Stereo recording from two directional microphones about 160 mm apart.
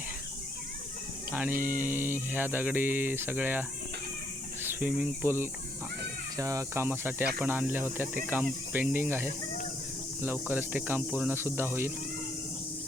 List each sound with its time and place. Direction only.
1.3 s speech: 10° right (ahead or behind)
4.6 s cricket: 15° right (ahead or behind)
4.9 s speech: 15° right (ahead or behind)